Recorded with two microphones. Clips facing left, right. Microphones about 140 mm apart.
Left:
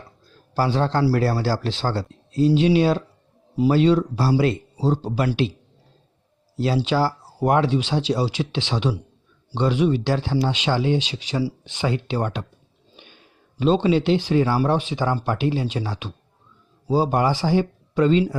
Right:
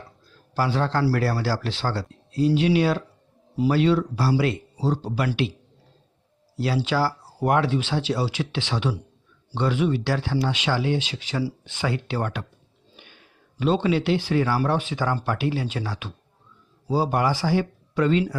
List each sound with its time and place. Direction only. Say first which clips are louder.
0.5 s speech: left 2 dB; 30° left (ahead or behind)
6.6 s speech: left 3 dB; 25° left (ahead or behind)